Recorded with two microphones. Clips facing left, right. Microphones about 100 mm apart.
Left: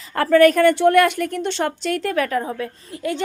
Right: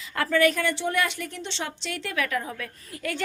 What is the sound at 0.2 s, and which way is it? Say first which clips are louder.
A woman's voice: left 9 dB; 45° left (ahead or behind).